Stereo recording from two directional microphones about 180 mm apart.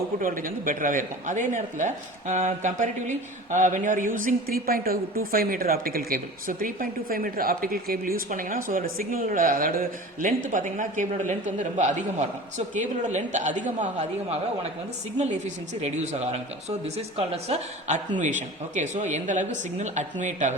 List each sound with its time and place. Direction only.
0.2 s a woman's voice: 50° right (ahead or behind)
15.2 s a woman's voice: 40° right (ahead or behind)